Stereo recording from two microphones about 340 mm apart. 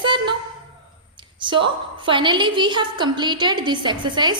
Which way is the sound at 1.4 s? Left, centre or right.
Centre.